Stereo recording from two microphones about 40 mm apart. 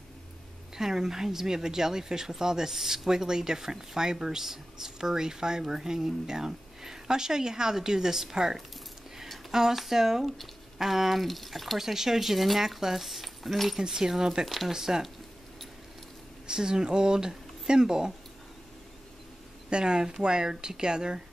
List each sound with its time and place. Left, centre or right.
0.7 s speech: centre
13.7 s speech: centre
14.4 s speech: centre
16.4 s speech: centre
19.7 s speech: right